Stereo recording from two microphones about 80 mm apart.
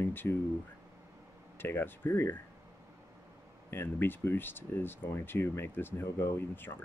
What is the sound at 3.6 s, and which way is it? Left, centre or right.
Speech, left.